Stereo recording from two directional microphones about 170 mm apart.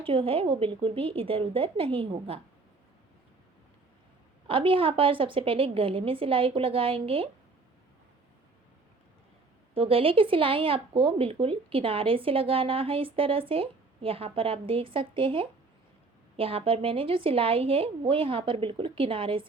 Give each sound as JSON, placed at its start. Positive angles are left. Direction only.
{"t": 0.0, "sound": "speech", "side_deg": -30}
{"t": 4.4, "sound": "speech", "side_deg": -30}
{"t": 9.7, "sound": "speech", "side_deg": -35}